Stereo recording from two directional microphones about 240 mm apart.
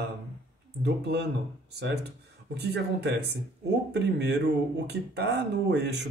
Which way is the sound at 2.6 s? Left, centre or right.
Right.